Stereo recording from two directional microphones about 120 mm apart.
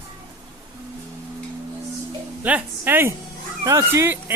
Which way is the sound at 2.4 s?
15° right (ahead or behind).